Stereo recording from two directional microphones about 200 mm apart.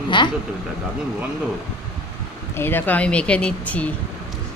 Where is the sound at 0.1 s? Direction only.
25° left (ahead or behind).